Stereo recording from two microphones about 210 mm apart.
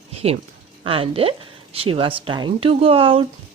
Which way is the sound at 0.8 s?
25° right (ahead or behind).